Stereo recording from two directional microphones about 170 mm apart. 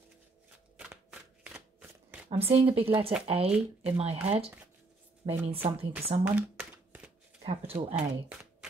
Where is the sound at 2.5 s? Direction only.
35° right (ahead or behind).